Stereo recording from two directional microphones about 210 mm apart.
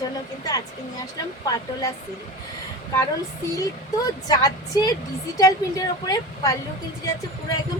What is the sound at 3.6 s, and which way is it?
A woman's voice, 15° left (ahead or behind).